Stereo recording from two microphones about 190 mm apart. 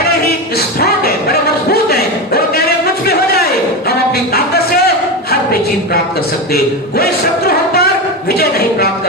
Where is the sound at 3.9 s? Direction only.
55° left (ahead or behind).